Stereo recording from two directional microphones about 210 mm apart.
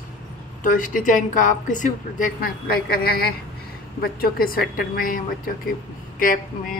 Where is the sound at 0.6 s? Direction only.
40° left (ahead or behind).